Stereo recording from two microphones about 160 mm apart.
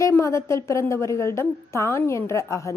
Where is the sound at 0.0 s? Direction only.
20° left (ahead or behind).